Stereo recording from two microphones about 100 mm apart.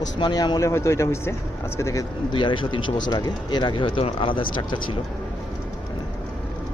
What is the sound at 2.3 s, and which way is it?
Speech, 55° left (ahead or behind).